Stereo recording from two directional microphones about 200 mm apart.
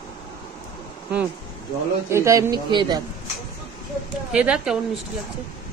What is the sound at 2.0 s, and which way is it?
Speech, 15° right (ahead or behind).